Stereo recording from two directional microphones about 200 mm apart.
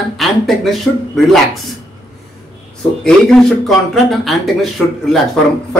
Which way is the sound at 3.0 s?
Centre (ahead or behind).